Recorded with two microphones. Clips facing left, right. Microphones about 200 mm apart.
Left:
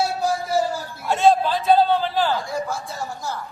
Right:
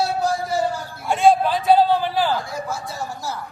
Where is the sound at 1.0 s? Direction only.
15° right (ahead or behind).